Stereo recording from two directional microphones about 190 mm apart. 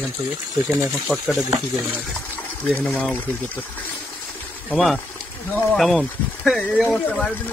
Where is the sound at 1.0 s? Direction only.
Centre (ahead or behind).